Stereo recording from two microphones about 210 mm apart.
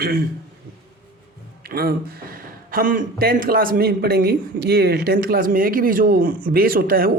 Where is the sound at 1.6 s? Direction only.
45° right (ahead or behind).